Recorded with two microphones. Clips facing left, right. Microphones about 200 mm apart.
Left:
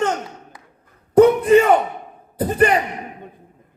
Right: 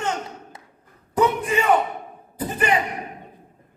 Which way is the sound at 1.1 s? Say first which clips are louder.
Left 10 dB; 55° left (ahead or behind).